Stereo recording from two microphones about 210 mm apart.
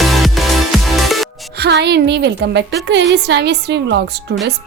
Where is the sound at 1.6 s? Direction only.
55° right (ahead or behind).